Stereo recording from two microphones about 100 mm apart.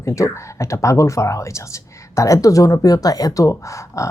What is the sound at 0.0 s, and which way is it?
Speech, 30° left (ahead or behind).